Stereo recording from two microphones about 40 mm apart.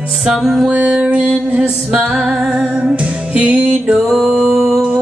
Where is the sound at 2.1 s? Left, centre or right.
Centre.